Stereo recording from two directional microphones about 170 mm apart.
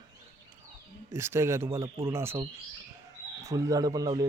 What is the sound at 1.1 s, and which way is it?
Speech, 15° right (ahead or behind).